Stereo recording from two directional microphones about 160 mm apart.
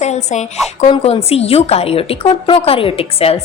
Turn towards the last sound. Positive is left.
turn(degrees=40)  # may be behind; listen again after turning